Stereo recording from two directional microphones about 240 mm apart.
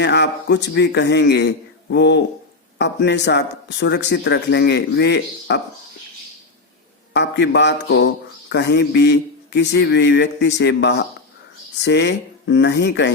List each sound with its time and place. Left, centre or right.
0.0 s speech: left
7.1 s speech: left